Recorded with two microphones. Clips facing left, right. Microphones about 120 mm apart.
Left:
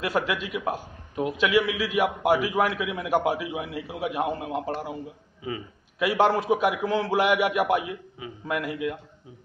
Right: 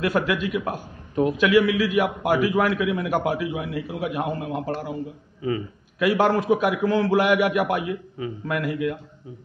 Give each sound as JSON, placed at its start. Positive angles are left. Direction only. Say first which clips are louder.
{"t": 0.0, "sound": "a man's voice", "louder": "right 4 dB", "side_deg": 20}
{"t": 5.4, "sound": "a sound", "louder": "right 7 dB", "side_deg": 10}
{"t": 6.0, "sound": "a man's voice", "louder": "right 2 dB", "side_deg": 20}